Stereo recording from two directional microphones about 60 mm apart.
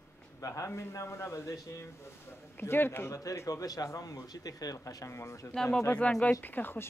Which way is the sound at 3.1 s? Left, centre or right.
Left.